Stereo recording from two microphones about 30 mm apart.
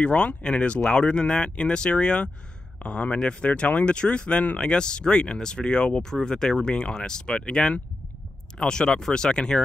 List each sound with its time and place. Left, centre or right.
0.0 s speech: left
2.8 s speech: left
3.2 s speech: left
3.4 s speech: left
4.6 s speech: left